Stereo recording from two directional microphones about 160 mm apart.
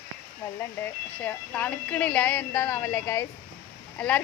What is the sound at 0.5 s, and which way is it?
Speech, 10° left (ahead or behind).